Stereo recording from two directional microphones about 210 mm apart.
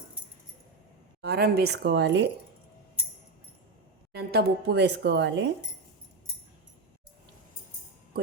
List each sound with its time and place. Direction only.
1.2 s speech: 50° right (ahead or behind)
4.1 s speech: 50° right (ahead or behind)